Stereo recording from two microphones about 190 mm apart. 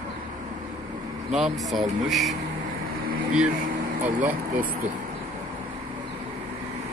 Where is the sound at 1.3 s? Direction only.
Centre (ahead or behind).